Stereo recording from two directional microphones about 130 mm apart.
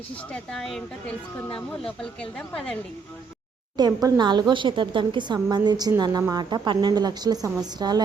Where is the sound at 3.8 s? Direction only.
30° right (ahead or behind).